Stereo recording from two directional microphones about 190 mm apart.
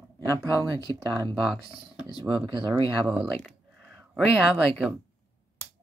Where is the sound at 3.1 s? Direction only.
5° right (ahead or behind).